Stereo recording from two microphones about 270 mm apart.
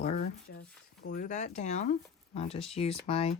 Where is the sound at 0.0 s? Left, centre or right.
Left.